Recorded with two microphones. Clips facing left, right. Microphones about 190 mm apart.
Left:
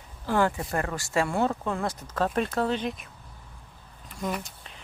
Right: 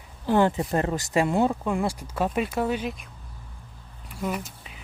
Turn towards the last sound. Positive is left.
turn(degrees=-5)  # may be behind; listen again after turning